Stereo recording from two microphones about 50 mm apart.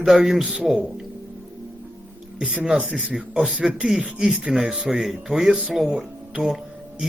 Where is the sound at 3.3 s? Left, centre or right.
Centre.